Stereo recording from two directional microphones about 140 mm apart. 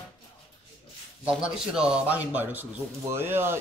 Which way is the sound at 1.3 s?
5° right (ahead or behind).